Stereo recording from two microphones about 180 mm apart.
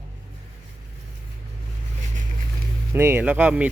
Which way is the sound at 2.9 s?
15° right (ahead or behind).